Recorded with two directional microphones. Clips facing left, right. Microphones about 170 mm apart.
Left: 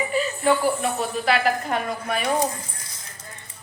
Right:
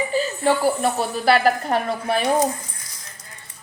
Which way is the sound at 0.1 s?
30° right (ahead or behind).